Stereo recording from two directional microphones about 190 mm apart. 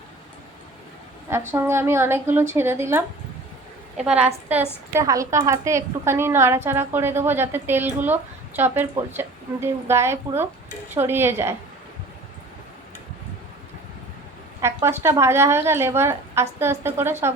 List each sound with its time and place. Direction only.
1.3 s a woman's voice: 15° right (ahead or behind)
4.0 s a woman's voice: 5° right (ahead or behind)
4.9 s a woman's voice: 15° right (ahead or behind)
14.6 s a woman's voice: 15° right (ahead or behind)